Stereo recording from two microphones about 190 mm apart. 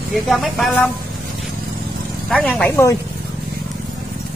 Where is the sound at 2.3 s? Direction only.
5° left (ahead or behind).